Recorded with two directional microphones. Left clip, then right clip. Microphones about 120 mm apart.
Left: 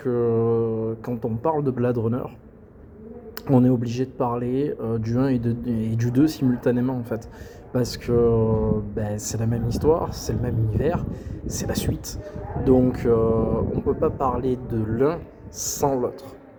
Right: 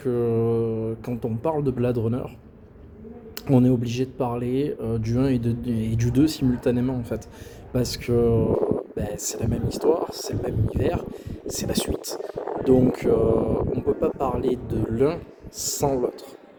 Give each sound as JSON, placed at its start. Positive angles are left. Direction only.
{"t": 0.0, "sound": "a sound", "side_deg": -25}
{"t": 3.4, "sound": "speech", "side_deg": -25}
{"t": 12.7, "sound": "speech", "side_deg": -25}